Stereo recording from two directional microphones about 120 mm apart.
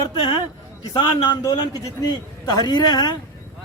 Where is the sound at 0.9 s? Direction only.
40° left (ahead or behind).